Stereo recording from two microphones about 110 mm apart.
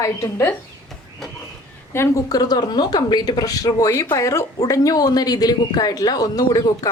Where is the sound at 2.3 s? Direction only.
35° left (ahead or behind).